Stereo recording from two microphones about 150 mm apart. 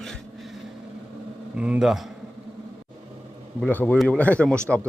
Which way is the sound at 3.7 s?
10° left (ahead or behind).